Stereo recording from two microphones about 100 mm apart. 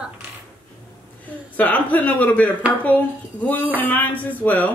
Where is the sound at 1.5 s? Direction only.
15° left (ahead or behind).